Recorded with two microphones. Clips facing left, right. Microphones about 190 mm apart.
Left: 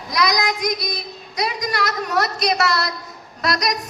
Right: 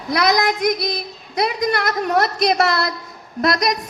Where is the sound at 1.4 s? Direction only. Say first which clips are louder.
Right 4 dB; 55° right (ahead or behind).